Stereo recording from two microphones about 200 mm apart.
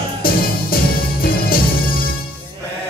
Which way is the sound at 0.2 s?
45° left (ahead or behind).